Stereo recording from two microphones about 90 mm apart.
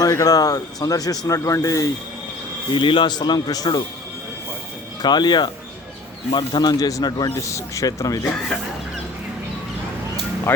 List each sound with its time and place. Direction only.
0.0 s speech: 45° left (ahead or behind)
2.7 s speech: 65° left (ahead or behind); by 3.8 s 50° left (ahead or behind)
5.0 s speech: 55° left (ahead or behind); by 8.3 s 35° left (ahead or behind)